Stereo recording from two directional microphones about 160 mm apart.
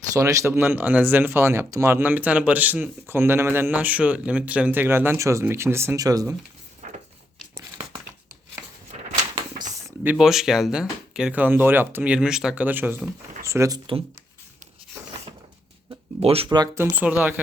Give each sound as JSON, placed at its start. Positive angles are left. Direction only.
{"t": 0.1, "sound": "speech", "side_deg": -20}
{"t": 6.8, "sound": "a sound", "side_deg": -50}
{"t": 8.9, "sound": "door", "side_deg": -45}
{"t": 10.0, "sound": "speech", "side_deg": -5}
{"t": 16.2, "sound": "speech", "side_deg": -35}
{"t": 16.7, "sound": "speech", "side_deg": -15}